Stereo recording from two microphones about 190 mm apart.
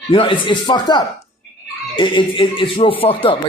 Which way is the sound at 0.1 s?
25° left (ahead or behind).